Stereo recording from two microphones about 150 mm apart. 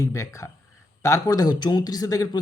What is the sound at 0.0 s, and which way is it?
Speech, 20° left (ahead or behind).